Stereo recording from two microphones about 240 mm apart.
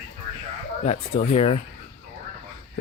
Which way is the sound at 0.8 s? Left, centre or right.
Left.